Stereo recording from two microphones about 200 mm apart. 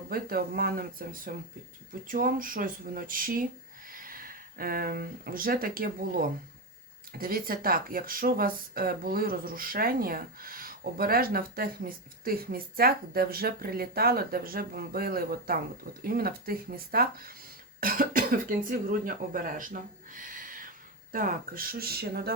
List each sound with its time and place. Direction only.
0.1 s speech: 45° right (ahead or behind)